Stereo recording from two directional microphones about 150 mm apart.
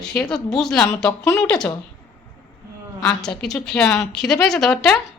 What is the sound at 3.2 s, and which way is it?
Speech, 5° left (ahead or behind).